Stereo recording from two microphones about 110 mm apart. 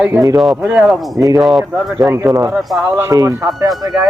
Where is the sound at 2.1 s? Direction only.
30° right (ahead or behind).